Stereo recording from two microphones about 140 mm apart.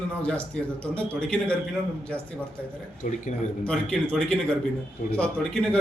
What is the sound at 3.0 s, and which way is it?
Speech, 65° left (ahead or behind).